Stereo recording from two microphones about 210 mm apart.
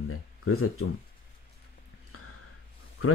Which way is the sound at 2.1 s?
90° left.